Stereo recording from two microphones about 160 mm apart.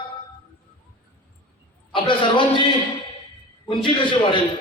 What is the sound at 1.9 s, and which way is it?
Speech, 30° left (ahead or behind).